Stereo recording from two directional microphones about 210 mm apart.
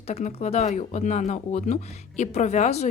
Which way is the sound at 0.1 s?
30° left (ahead or behind).